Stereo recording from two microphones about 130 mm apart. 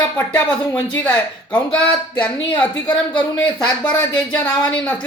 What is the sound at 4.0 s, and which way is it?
Speech, 35° left (ahead or behind).